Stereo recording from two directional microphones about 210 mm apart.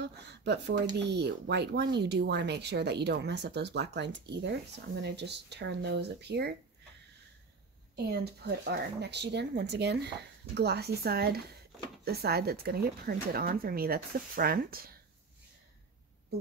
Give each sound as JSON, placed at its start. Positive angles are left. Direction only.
{"t": 0.0, "sound": "a sound", "side_deg": -55}
{"t": 0.9, "sound": "speech", "side_deg": -55}
{"t": 7.9, "sound": "speech", "side_deg": -50}